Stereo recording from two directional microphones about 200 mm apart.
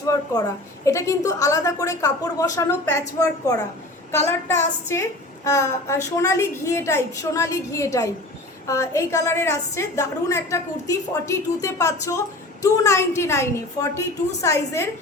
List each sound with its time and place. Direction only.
0.1 s a woman's voice: 15° left (ahead or behind)
4.1 s a woman's voice: 10° left (ahead or behind)